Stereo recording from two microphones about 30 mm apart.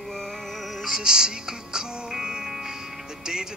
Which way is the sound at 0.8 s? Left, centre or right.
Right.